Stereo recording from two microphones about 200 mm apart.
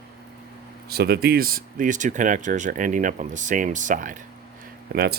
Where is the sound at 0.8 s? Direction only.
50° right (ahead or behind).